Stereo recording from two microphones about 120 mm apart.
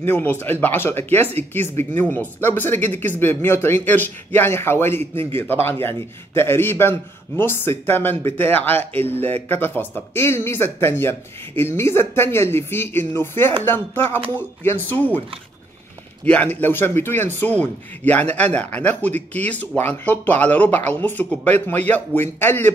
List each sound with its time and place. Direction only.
0.0 s speech: 15° left (ahead or behind)
16.3 s speech: 15° left (ahead or behind)